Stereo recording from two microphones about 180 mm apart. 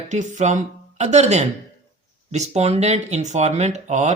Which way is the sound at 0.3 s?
40° right (ahead or behind).